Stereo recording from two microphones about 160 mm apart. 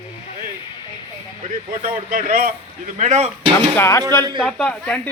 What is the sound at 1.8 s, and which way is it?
Speech, 45° right (ahead or behind).